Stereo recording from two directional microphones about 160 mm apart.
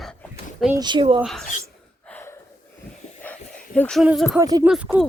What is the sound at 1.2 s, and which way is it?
Speech, centre (ahead or behind).